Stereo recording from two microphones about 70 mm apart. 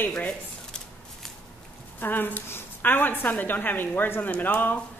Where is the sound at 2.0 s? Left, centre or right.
Left.